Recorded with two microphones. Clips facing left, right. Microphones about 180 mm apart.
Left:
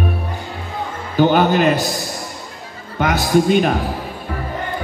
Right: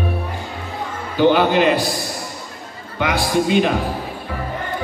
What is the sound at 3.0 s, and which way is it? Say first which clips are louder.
Speech: left 3 dB; 45° left (ahead or behind).